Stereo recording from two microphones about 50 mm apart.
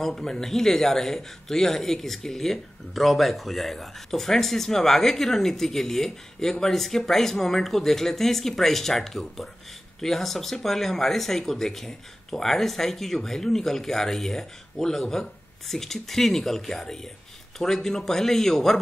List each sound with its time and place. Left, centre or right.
0.0 s speech: centre